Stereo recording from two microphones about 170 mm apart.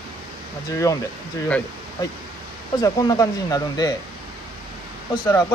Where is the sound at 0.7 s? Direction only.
20° left (ahead or behind).